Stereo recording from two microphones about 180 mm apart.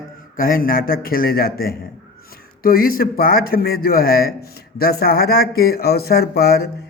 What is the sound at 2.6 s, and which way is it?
Speech, 55° left (ahead or behind).